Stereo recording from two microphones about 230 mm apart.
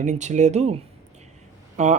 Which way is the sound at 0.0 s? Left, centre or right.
Right.